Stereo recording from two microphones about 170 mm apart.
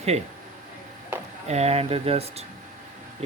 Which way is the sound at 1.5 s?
40° right (ahead or behind).